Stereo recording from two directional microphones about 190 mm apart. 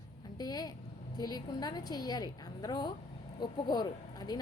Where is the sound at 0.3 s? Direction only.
20° left (ahead or behind).